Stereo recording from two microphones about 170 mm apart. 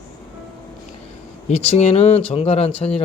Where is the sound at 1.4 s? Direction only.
40° left (ahead or behind).